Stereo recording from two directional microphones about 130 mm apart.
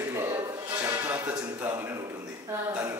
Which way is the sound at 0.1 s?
25° right (ahead or behind).